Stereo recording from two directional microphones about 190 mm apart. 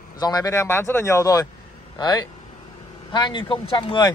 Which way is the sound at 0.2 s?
20° left (ahead or behind).